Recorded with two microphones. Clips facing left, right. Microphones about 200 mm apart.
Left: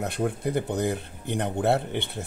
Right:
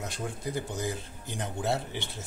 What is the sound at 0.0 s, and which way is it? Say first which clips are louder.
Speech: left 8 dB; 60° left (ahead or behind).